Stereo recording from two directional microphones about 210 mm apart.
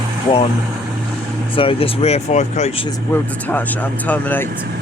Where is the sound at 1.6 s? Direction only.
25° left (ahead or behind).